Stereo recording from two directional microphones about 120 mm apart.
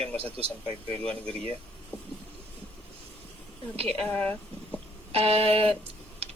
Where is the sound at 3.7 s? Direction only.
55° right (ahead or behind).